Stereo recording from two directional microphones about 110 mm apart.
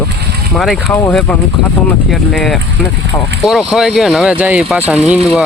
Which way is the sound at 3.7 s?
Centre (ahead or behind).